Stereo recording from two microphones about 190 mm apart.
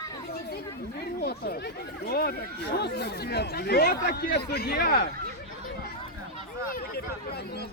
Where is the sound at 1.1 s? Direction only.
55° left (ahead or behind).